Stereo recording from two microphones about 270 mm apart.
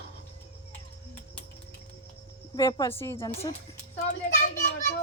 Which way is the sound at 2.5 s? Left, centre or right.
Centre.